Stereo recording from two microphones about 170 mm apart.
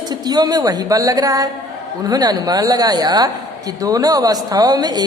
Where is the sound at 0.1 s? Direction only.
25° right (ahead or behind).